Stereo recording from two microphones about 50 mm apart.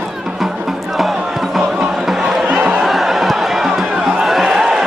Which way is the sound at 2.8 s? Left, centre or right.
Centre.